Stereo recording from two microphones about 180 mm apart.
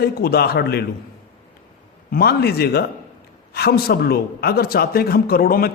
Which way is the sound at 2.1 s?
60° left (ahead or behind).